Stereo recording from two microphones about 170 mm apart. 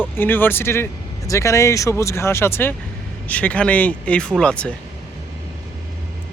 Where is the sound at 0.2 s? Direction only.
10° left (ahead or behind).